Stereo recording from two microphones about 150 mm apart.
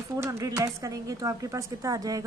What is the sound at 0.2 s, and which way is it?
Speech, 20° right (ahead or behind).